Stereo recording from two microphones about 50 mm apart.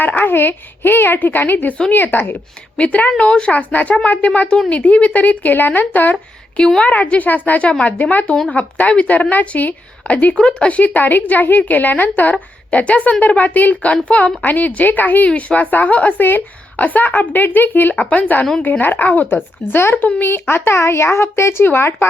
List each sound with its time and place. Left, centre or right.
0.0 s a woman's voice: left
2.7 s a woman's voice: left
3.5 s a woman's voice: left
10.3 s a woman's voice: centre
19.7 s speech: left
21.6 s speech: left